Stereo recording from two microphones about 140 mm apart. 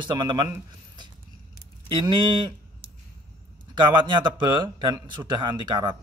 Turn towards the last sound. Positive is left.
turn(degrees=-30)  # may be behind; listen again after turning